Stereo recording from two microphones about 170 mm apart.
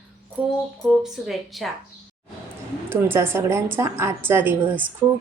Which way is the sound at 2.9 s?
15° right (ahead or behind).